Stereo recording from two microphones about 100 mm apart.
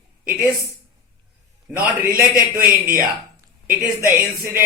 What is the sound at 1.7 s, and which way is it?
Speech, 10° right (ahead or behind).